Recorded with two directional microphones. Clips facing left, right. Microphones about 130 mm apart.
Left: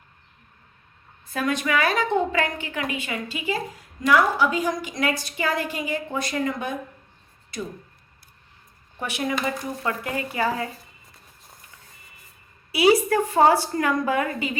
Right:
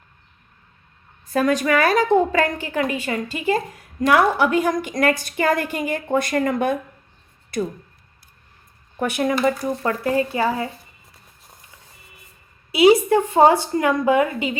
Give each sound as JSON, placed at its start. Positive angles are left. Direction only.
{"t": 1.3, "sound": "a woman's voice", "side_deg": -40}
{"t": 4.0, "sound": "a woman's voice", "side_deg": -60}
{"t": 9.0, "sound": "speech", "side_deg": -50}
{"t": 9.8, "sound": "a woman's voice", "side_deg": -35}
{"t": 12.7, "sound": "a woman's voice", "side_deg": -20}